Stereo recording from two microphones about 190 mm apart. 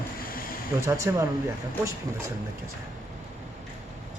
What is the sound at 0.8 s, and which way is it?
Speech, 15° right (ahead or behind).